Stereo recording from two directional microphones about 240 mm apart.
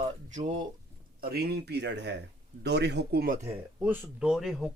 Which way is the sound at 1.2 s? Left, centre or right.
Right.